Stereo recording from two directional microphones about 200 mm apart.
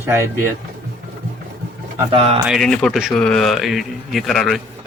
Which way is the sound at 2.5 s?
Centre (ahead or behind).